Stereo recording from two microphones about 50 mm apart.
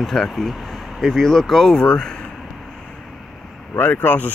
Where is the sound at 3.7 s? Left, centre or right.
Left.